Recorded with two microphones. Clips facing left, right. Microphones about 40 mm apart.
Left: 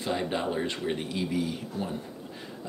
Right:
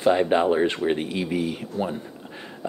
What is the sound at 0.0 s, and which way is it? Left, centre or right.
Speech, right.